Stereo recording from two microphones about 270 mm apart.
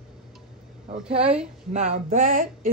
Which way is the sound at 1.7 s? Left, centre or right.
Right.